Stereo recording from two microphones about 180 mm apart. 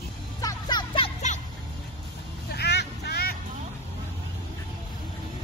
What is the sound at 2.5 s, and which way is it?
Vehicle, 70° left (ahead or behind).